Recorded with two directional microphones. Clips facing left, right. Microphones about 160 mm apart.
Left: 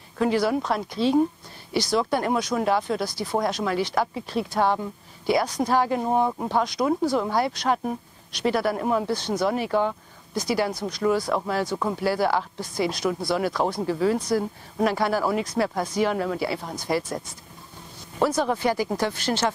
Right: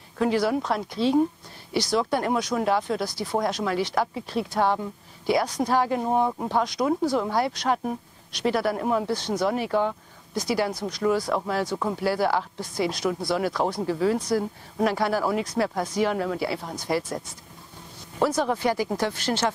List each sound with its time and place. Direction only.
0.2 s speech: 15° left (ahead or behind)
6.0 s speech: 25° left (ahead or behind)
18.2 s speech: 20° left (ahead or behind)